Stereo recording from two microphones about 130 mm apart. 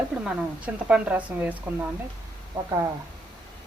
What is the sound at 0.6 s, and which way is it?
Speech, 10° right (ahead or behind).